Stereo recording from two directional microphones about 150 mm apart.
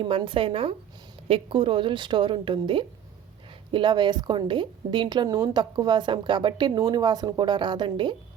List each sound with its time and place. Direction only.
0.0 s a woman's voice: 35° right (ahead or behind)